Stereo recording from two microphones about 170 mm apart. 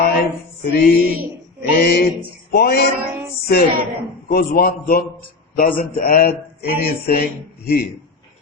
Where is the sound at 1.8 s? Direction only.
65° left (ahead or behind).